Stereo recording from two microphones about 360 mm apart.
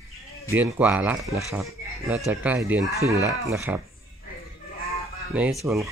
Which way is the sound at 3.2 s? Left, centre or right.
Centre.